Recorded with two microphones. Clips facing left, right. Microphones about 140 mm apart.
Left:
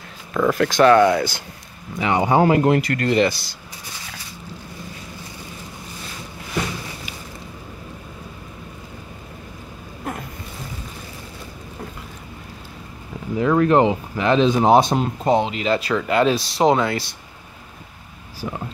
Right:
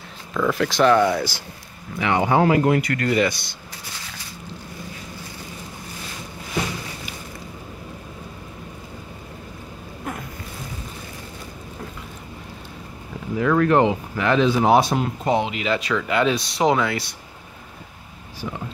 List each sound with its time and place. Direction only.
0.3 s speech: 45° left (ahead or behind)
2.0 s speech: 15° left (ahead or behind)
2.4 s speech: 30° left (ahead or behind)
13.4 s speech: 25° left (ahead or behind)
18.4 s speech: 30° left (ahead or behind)